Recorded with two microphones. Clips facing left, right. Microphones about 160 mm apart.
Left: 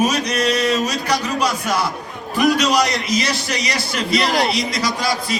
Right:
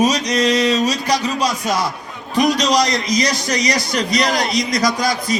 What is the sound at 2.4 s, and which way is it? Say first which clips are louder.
A man's voice: right 1 dB; 35° right (ahead or behind).